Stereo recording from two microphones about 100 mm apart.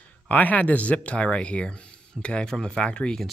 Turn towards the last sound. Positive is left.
turn(degrees=10)  # may be behind; listen again after turning